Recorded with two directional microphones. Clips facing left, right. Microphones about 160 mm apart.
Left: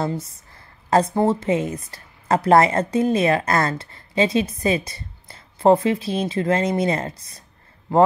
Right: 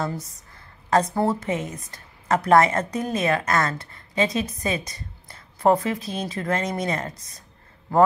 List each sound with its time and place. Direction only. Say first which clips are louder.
0.8 s speech: left 3 dB; 30° left (ahead or behind)